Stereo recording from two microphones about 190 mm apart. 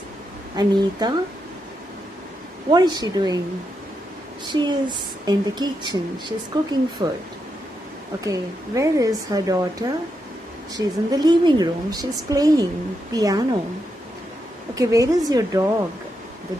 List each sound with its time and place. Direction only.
0.6 s a woman's voice: 20° right (ahead or behind)
2.7 s a woman's voice: 20° right (ahead or behind)
4.5 s a woman's voice: 25° right (ahead or behind)
8.2 s a woman's voice: 15° right (ahead or behind)
14.8 s speech: 20° right (ahead or behind)